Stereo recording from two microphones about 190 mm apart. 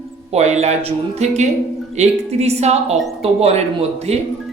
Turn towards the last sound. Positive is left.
turn(degrees=-35)  # may be behind; listen again after turning